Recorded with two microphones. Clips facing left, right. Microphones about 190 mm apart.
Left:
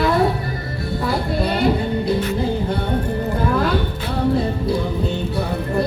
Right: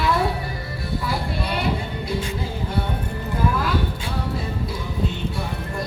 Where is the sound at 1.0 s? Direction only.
40° left (ahead or behind).